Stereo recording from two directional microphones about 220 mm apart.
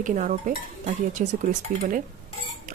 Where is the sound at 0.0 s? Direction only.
35° right (ahead or behind).